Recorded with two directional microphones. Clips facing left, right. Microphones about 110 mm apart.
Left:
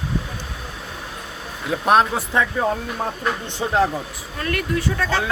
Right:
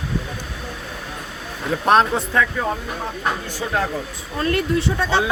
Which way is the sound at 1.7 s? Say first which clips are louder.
Right 1 dB; 5° left (ahead or behind).